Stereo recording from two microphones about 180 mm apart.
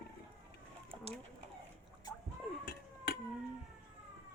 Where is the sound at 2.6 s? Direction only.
60° left (ahead or behind).